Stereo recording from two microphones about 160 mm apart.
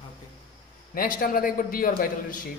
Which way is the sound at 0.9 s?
65° left (ahead or behind).